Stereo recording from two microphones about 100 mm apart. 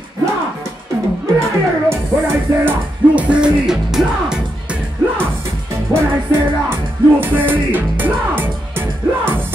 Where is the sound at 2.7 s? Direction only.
15° right (ahead or behind).